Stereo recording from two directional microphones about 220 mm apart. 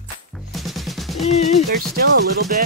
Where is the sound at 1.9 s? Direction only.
45° right (ahead or behind).